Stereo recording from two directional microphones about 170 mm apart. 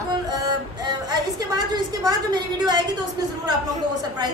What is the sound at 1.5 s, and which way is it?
A woman's voice, 20° right (ahead or behind).